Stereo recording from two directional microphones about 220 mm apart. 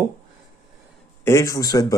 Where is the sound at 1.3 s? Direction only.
15° left (ahead or behind).